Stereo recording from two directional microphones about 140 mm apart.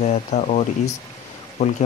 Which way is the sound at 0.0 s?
55° left (ahead or behind).